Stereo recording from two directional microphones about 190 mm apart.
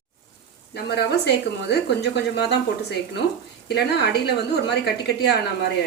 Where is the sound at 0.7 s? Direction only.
60° left (ahead or behind).